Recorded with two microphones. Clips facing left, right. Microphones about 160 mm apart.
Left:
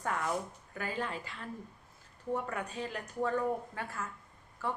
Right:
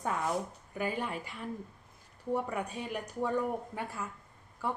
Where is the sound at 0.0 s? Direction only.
15° right (ahead or behind).